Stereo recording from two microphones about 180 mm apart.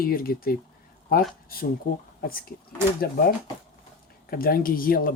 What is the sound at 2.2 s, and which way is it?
Speech, 55° left (ahead or behind).